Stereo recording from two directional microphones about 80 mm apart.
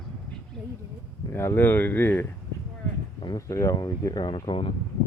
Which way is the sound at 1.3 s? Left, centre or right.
Left.